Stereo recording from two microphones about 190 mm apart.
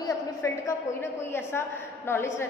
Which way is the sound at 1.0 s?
10° left (ahead or behind).